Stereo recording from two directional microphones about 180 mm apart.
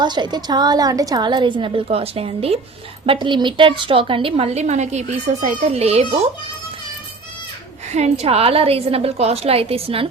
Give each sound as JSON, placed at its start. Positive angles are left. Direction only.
{"t": 0.0, "sound": "a woman's voice", "side_deg": -25}
{"t": 8.2, "sound": "a woman's voice", "side_deg": -35}